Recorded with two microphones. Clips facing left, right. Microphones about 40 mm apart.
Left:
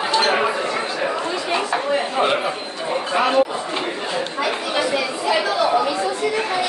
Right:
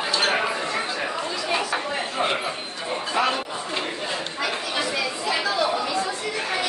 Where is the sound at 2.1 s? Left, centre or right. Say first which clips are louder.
Left 5 dB; left.